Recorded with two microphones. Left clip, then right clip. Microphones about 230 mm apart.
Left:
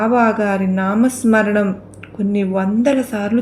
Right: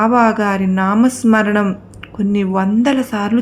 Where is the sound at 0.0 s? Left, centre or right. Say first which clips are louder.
Right 2 dB; right.